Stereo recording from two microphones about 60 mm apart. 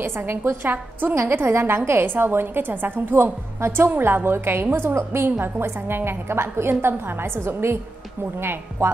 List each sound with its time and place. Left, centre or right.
0.0 s a woman's voice: right